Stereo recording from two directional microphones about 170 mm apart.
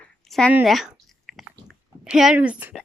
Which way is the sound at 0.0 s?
5° left (ahead or behind).